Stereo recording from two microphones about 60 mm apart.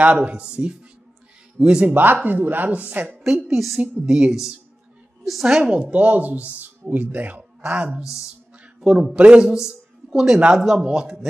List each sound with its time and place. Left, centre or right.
0.0 s a woman's voice: right
2.2 s a woman's voice: right
3.3 s a woman's voice: centre
4.0 s a man's voice: centre